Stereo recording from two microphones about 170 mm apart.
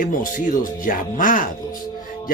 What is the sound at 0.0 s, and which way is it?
A man's voice, 50° left (ahead or behind).